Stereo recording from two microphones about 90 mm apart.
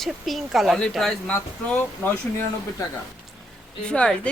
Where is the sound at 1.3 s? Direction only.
20° left (ahead or behind).